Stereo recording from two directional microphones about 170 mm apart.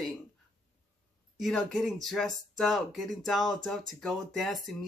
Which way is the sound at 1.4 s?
Centre (ahead or behind).